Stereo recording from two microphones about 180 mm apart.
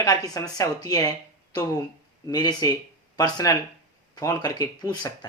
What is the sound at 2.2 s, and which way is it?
Speech, 20° left (ahead or behind).